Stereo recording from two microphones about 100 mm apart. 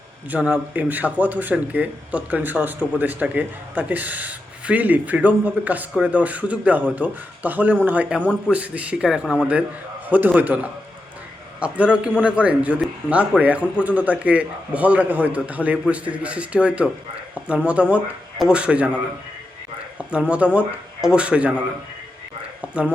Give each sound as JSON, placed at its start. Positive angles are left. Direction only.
{"t": 0.3, "sound": "speech", "side_deg": -15}
{"t": 20.0, "sound": "speech", "side_deg": -15}
{"t": 22.7, "sound": "speech", "side_deg": -10}